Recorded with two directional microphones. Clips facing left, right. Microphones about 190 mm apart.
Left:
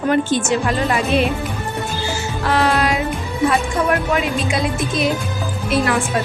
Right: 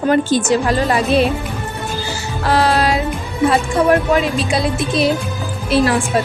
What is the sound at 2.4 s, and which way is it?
Music, 35° right (ahead or behind).